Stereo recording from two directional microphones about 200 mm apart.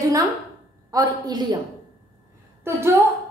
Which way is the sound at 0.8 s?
15° right (ahead or behind).